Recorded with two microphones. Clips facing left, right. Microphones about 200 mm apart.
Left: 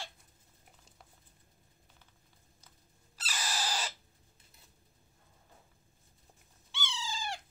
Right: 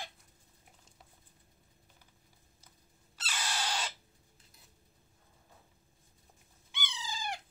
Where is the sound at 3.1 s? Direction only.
5° left (ahead or behind).